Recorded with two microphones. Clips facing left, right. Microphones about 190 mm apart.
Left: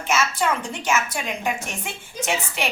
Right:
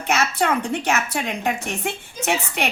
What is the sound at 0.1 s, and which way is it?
A woman's voice, 65° right (ahead or behind).